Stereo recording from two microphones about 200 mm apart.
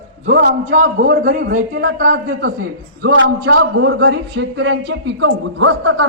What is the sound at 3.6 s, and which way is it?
A man's voice, 70° right (ahead or behind).